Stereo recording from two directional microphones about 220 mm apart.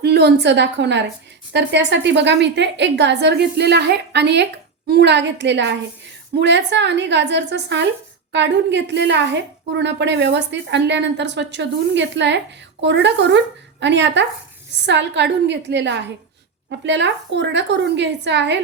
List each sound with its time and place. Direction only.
0.0 s a woman's voice: 45° right (ahead or behind)